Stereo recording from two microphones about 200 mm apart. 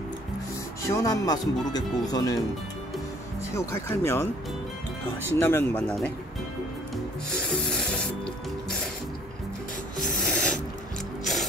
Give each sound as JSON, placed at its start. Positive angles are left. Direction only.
{"t": 0.8, "sound": "speech", "side_deg": 15}
{"t": 3.5, "sound": "speech", "side_deg": 15}
{"t": 5.3, "sound": "speech", "side_deg": 10}
{"t": 7.3, "sound": "rub", "side_deg": 5}
{"t": 10.2, "sound": "music", "side_deg": 5}